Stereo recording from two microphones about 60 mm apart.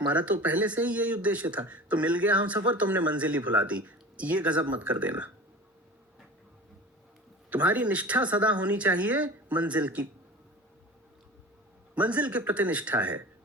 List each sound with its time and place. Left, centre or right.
0.1 s speech: right
7.5 s speech: right
11.9 s speech: right